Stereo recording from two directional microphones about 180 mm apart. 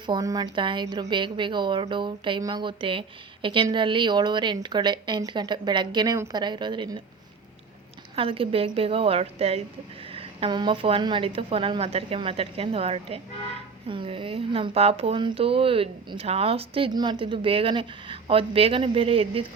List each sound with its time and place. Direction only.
0.0 s a woman's voice: 20° right (ahead or behind)
8.1 s speech: 30° right (ahead or behind)